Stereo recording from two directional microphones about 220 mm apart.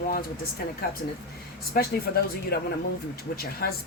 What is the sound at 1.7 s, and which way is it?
Speech, 45° left (ahead or behind).